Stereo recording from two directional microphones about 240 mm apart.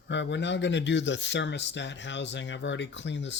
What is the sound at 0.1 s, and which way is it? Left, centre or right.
Speech, left.